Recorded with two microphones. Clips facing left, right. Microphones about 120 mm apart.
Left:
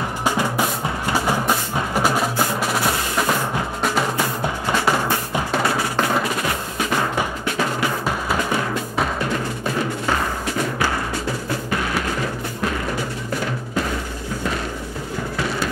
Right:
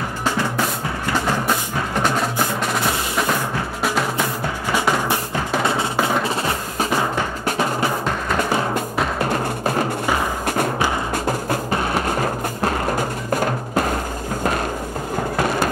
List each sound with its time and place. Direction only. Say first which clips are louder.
0.2 s music: left 1 dB; 15° left (ahead or behind)
7.4 s music: right 4 dB; 35° right (ahead or behind)
9.2 s music: right 3 dB; 45° right (ahead or behind)
11.7 s music: right 2 dB; 35° right (ahead or behind)
15.3 s a sound: right 4 dB; 50° right (ahead or behind)